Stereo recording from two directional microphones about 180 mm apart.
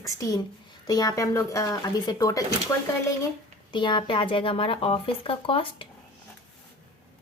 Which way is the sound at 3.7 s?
25° left (ahead or behind).